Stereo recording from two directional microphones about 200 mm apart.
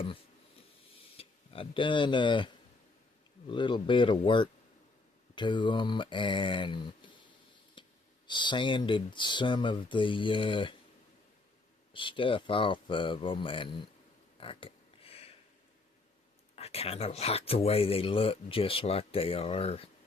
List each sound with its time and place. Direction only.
1.1 s speech: 30° left (ahead or behind)
3.5 s speech: 25° left (ahead or behind)
7.8 s a sound: 25° left (ahead or behind)
8.3 s speech: 25° left (ahead or behind)
11.9 s speech: 25° left (ahead or behind)
14.3 s a sound: 25° left (ahead or behind)
16.6 s speech: 30° left (ahead or behind)